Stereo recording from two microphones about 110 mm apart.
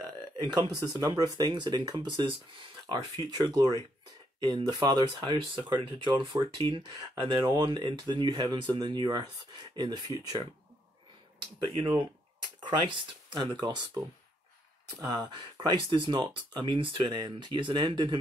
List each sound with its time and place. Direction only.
0.4 s speech: 40° right (ahead or behind)
11.6 s speech: 50° right (ahead or behind)
15.0 s speech: 45° right (ahead or behind)